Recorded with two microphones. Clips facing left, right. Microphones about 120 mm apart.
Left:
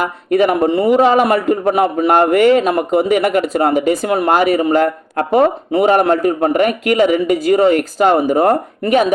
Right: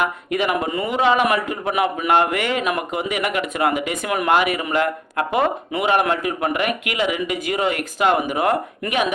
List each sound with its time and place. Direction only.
0.0 s a man's voice: 40° left (ahead or behind)